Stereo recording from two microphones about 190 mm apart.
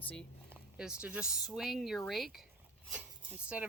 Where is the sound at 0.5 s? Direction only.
5° right (ahead or behind).